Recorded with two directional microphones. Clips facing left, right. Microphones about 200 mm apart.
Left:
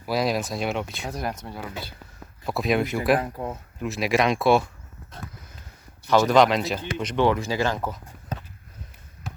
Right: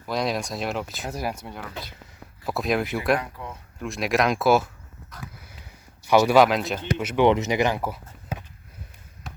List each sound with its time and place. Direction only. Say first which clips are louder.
0.0 s speech: left 2 dB; 5° left (ahead or behind)
3.2 s speech: left 5 dB; 40° left (ahead or behind)
3.8 s speech: left 1 dB; 5° left (ahead or behind)
5.2 s sniff: even; 10° right (ahead or behind)
6.1 s speech: right 1 dB; 10° right (ahead or behind)
7.3 s speech: right 5 dB; 20° right (ahead or behind)